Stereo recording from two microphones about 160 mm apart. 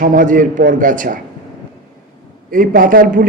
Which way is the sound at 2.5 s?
60° right (ahead or behind).